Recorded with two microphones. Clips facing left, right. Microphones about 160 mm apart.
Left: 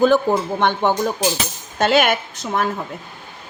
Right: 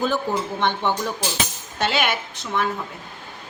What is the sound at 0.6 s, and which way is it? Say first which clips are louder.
A woman's voice: left 4 dB; 45° left (ahead or behind).